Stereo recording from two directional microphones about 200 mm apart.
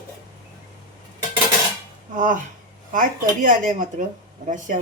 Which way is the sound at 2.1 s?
40° right (ahead or behind).